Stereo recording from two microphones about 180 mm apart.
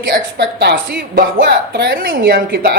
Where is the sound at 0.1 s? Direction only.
65° right (ahead or behind).